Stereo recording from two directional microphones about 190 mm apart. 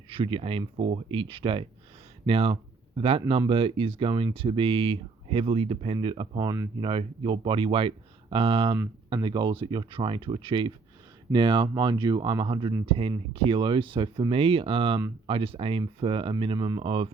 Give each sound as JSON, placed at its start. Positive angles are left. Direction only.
{"t": 0.1, "sound": "speech", "side_deg": -30}